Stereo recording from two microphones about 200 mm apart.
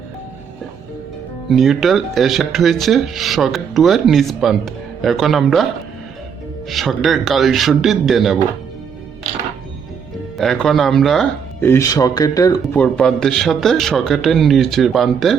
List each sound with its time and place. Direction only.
1.5 s speech: centre (ahead or behind)
6.7 s speech: centre (ahead or behind)
10.3 s speech: centre (ahead or behind)
11.6 s speech: 15° left (ahead or behind)
12.7 s speech: 5° left (ahead or behind)